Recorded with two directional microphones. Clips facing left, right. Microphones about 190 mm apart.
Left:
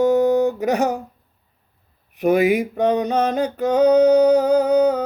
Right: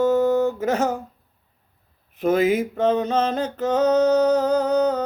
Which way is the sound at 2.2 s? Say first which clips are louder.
Left 2 dB; 15° left (ahead or behind).